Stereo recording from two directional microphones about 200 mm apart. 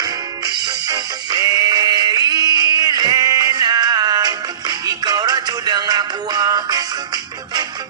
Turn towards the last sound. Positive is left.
turn(degrees=-20)  # may be behind; listen again after turning